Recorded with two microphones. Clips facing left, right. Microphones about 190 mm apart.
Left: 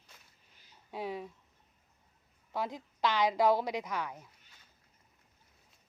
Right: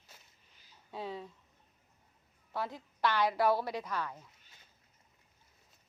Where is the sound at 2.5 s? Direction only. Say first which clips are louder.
Left 2 dB; 15° left (ahead or behind).